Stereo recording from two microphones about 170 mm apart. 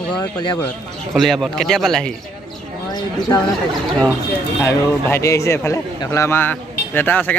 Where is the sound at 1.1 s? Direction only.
Centre (ahead or behind).